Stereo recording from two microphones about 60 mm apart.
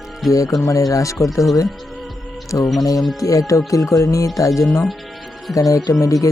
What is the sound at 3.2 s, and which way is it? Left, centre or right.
Speech, left.